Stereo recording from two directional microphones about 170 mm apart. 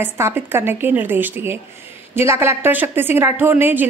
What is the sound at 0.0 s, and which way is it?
A woman's voice, 15° right (ahead or behind).